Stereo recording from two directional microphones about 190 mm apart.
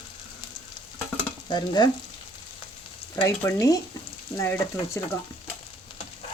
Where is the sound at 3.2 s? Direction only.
15° left (ahead or behind).